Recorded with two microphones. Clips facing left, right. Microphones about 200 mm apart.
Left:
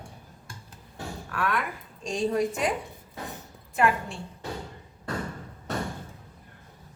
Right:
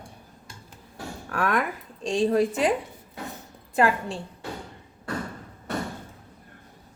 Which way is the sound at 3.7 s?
35° right (ahead or behind).